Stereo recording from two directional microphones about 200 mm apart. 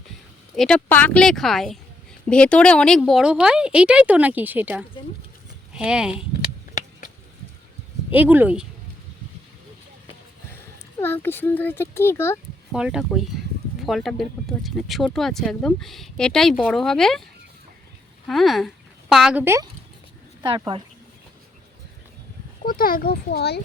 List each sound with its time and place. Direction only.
0.5 s speech: centre (ahead or behind)
6.4 s a sound: 40° left (ahead or behind)
8.1 s speech: 10° right (ahead or behind)
11.0 s a child's voice: 10° left (ahead or behind)
12.7 s speech: 5° right (ahead or behind)
18.3 s speech: centre (ahead or behind)
20.4 s speech: 25° right (ahead or behind)
22.6 s speech: 45° left (ahead or behind)